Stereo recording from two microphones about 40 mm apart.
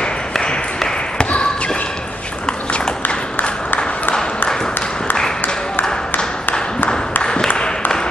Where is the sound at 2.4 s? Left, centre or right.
Left.